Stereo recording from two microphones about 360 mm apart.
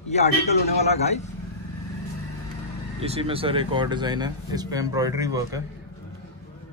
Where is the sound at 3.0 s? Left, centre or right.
Centre.